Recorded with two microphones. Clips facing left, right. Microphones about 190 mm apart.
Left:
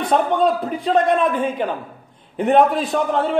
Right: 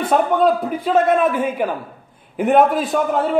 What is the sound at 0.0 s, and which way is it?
A man's voice, centre (ahead or behind).